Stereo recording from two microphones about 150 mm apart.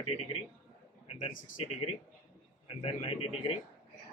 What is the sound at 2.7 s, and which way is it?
Speech, 40° left (ahead or behind).